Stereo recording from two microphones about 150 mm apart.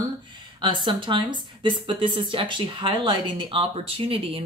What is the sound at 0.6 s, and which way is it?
Speech, 30° right (ahead or behind).